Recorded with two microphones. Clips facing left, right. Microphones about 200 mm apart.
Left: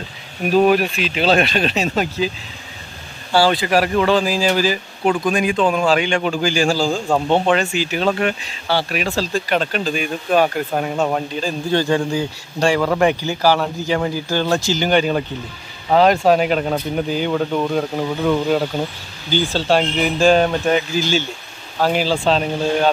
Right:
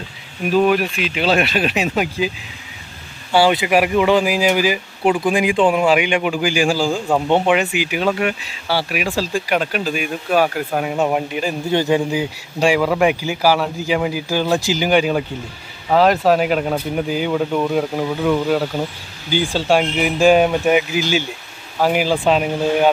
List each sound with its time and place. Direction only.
0.5 s speech: 40° left (ahead or behind)
1.5 s speech: 10° right (ahead or behind)
3.3 s speech: 20° right (ahead or behind)